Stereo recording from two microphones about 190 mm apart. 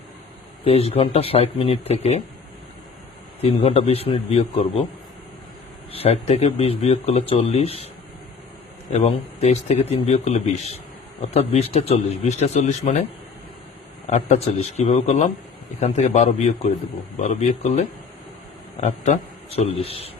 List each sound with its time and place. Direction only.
0.6 s speech: 30° left (ahead or behind)
3.4 s speech: 30° left (ahead or behind)
5.9 s speech: 30° left (ahead or behind)
8.9 s speech: 35° left (ahead or behind)
14.1 s speech: 40° left (ahead or behind)